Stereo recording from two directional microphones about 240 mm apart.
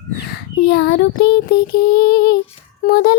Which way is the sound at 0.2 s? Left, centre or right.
Left.